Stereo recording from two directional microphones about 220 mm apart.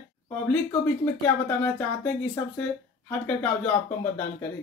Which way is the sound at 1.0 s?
10° left (ahead or behind).